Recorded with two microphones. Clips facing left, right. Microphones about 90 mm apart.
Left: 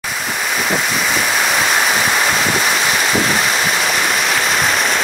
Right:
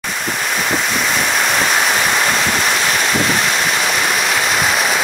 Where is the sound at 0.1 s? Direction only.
Centre (ahead or behind).